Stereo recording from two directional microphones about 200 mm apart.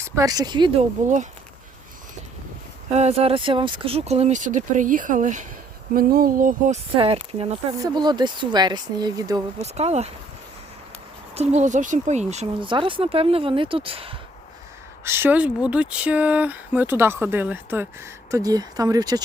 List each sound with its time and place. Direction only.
0.0 s speech: 15° right (ahead or behind)
1.0 s speech: 40° right (ahead or behind)
2.9 s speech: 30° right (ahead or behind)
6.9 s speech: 30° right (ahead or behind)
9.6 s speech: 30° right (ahead or behind)
11.3 s speech: 35° right (ahead or behind)
15.0 s speech: 10° right (ahead or behind)